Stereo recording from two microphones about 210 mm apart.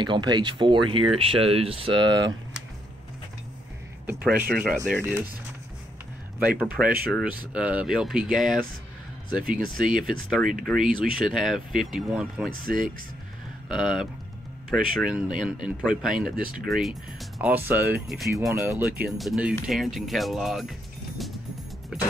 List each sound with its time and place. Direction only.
0.0 s speech: 20° right (ahead or behind)
4.0 s speech: 10° right (ahead or behind)
6.6 s speech: 5° right (ahead or behind)
12.4 s speech: 40° right (ahead or behind)
13.7 s speech: centre (ahead or behind)
18.5 s speech: 10° right (ahead or behind)
19.0 s speech: centre (ahead or behind)